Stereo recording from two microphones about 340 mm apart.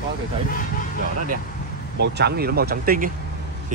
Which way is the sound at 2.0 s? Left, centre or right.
Right.